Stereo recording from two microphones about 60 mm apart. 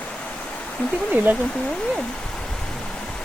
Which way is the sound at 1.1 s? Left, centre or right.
Right.